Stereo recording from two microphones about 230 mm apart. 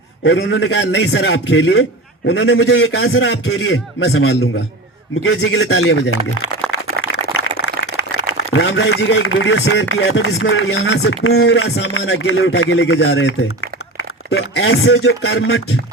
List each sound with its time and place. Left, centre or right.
0.3 s a man's voice: left
7.0 s a sound: left
8.4 s a man's voice: left
11.7 s speech: left